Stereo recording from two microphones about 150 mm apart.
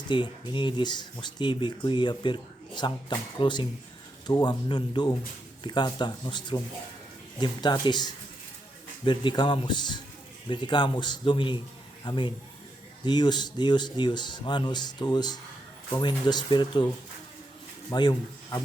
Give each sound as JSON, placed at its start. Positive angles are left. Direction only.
{"t": 0.1, "sound": "a man's voice", "side_deg": 30}
{"t": 17.9, "sound": "speech", "side_deg": 30}